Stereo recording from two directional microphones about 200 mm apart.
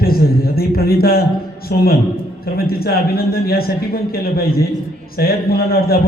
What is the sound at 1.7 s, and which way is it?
A man's voice, 50° left (ahead or behind).